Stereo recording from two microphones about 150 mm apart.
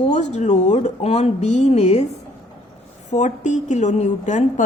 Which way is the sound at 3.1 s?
50° left (ahead or behind).